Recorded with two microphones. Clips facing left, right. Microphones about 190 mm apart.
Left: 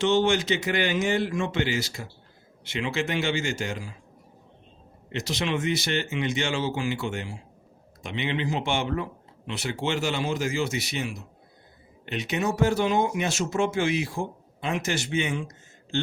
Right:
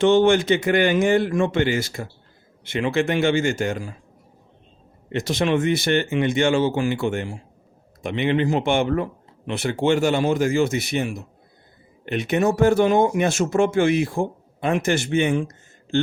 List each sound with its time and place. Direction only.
0.0 s speech: 55° right (ahead or behind)
5.0 s speech: 50° right (ahead or behind)